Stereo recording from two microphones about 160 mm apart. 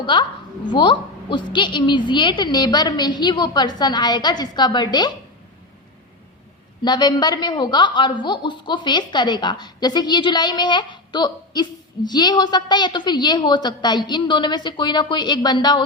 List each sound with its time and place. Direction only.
0.0 s a woman's voice: 30° left (ahead or behind)
6.8 s a woman's voice: 25° left (ahead or behind)